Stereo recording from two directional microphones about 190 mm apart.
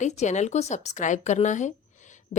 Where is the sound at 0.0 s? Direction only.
40° left (ahead or behind).